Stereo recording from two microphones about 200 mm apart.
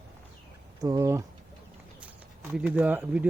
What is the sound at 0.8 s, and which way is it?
Speech, 15° right (ahead or behind).